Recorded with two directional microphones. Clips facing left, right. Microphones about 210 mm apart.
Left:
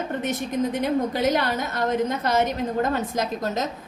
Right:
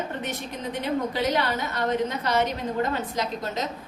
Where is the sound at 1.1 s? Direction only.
45° left (ahead or behind).